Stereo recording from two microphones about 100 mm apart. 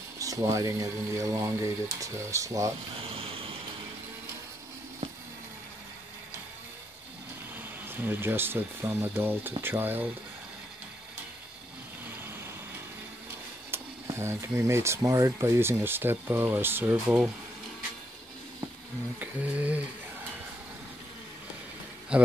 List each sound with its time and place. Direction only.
0.2 s speech: 35° right (ahead or behind)
3.1 s vehicle: 70° right (ahead or behind)
7.8 s speech: 20° right (ahead or behind)
13.7 s speech: 25° right (ahead or behind)
19.1 s a sound: 15° right (ahead or behind)
22.1 s a sound: 10° right (ahead or behind)